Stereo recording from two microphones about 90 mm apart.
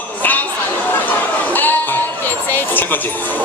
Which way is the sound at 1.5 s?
20° left (ahead or behind).